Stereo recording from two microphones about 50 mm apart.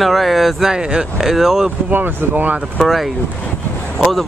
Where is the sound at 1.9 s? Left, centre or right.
Right.